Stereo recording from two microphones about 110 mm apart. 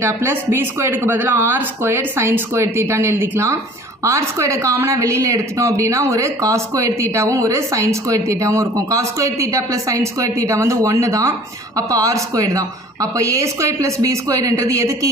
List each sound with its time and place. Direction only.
0.0 s a woman's voice: 25° right (ahead or behind)